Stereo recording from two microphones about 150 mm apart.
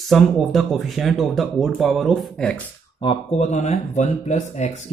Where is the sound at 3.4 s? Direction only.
50° left (ahead or behind).